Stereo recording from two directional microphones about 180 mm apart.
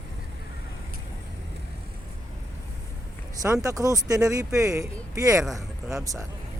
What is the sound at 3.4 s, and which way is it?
Speech, 20° right (ahead or behind).